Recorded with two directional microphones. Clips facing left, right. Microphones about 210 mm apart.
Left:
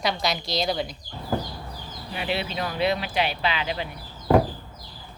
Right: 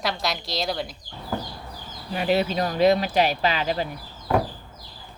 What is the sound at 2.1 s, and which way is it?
Speech, 40° right (ahead or behind).